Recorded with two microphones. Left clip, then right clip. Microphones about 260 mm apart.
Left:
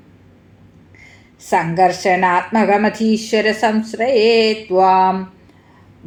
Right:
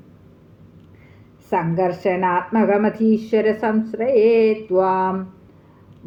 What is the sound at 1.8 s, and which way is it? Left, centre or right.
Speech, left.